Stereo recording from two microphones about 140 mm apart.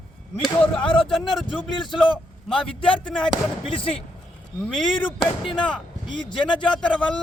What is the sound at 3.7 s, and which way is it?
Speech, 40° left (ahead or behind).